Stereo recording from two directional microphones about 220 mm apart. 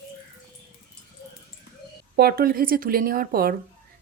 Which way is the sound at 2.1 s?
45° right (ahead or behind).